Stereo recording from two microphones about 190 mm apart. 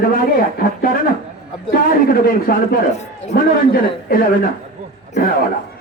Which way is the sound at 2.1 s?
50° left (ahead or behind).